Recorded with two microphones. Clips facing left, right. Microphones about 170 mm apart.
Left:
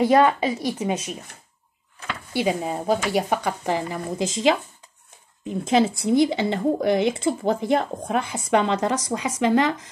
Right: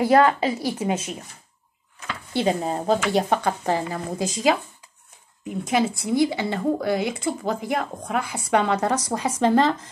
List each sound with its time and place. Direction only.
0.0 s speech: 20° left (ahead or behind)
2.4 s speech: 35° right (ahead or behind)
3.3 s speech: 15° left (ahead or behind)